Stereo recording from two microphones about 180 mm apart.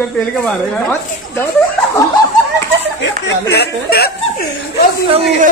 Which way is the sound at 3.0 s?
70° left (ahead or behind).